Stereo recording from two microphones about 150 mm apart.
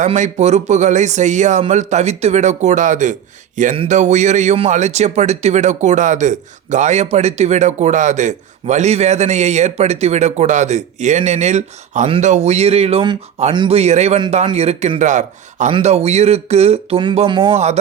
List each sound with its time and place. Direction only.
0.0 s speech: 50° right (ahead or behind); by 17.6 s 35° right (ahead or behind)